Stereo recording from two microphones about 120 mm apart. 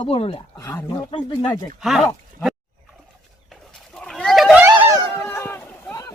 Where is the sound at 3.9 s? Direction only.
5° left (ahead or behind).